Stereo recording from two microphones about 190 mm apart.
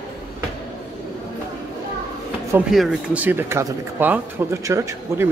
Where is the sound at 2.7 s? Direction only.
5° right (ahead or behind).